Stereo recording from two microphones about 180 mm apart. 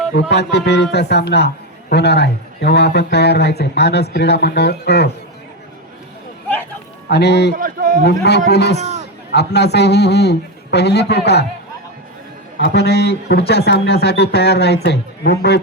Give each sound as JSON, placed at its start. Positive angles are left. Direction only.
{"t": 0.1, "sound": "speech", "side_deg": 70}
{"t": 7.1, "sound": "speech", "side_deg": 70}
{"t": 7.5, "sound": "a sound", "side_deg": -50}
{"t": 8.4, "sound": "a man's voice", "side_deg": 70}
{"t": 12.5, "sound": "a man's voice", "side_deg": 65}